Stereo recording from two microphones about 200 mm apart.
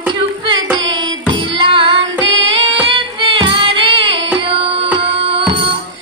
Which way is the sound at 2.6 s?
30° right (ahead or behind).